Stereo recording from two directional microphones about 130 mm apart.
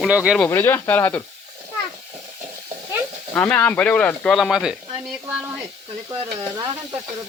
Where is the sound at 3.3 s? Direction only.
15° left (ahead or behind).